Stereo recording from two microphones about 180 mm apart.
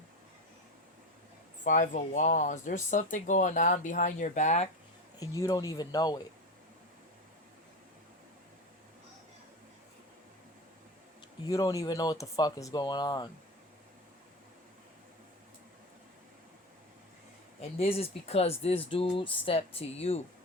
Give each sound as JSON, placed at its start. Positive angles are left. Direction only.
{"t": 1.6, "sound": "speech", "side_deg": 45}
{"t": 5.2, "sound": "speech", "side_deg": 20}
{"t": 11.4, "sound": "speech", "side_deg": 20}
{"t": 17.6, "sound": "speech", "side_deg": 35}